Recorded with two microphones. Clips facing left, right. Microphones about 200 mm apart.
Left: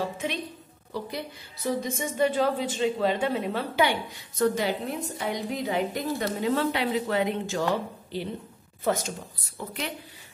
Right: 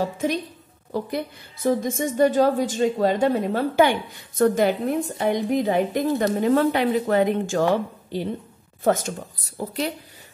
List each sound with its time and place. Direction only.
0.0 s a woman's voice: 45° right (ahead or behind)
9.6 s a woman's voice: 35° right (ahead or behind)